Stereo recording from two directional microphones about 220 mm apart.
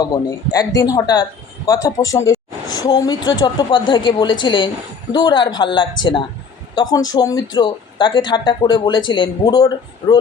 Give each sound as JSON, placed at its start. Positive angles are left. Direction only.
{"t": 0.0, "sound": "a woman's voice", "side_deg": 15}